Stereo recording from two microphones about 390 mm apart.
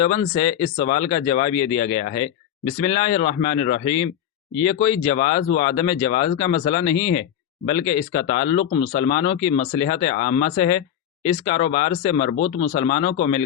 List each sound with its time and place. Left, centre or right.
0.0 s speech: centre